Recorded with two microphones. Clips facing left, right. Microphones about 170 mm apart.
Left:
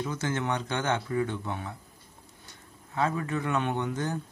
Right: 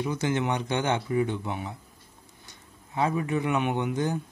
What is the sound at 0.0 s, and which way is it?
Speech, 15° right (ahead or behind).